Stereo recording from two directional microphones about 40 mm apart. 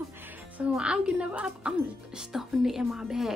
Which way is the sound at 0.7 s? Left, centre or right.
Right.